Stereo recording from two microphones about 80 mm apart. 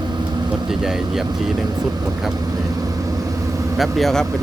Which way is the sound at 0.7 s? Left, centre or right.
Centre.